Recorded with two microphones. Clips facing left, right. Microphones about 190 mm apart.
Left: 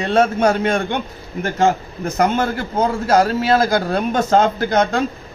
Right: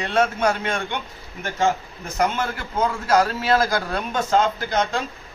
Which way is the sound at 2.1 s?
40° left (ahead or behind).